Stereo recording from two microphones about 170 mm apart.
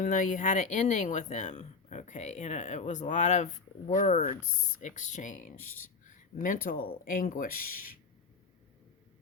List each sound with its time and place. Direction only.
0.0 s speech: 50° left (ahead or behind)